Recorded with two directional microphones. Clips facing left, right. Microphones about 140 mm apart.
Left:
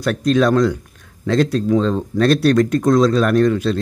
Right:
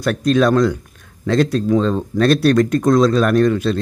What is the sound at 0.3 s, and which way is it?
Speech, 50° right (ahead or behind).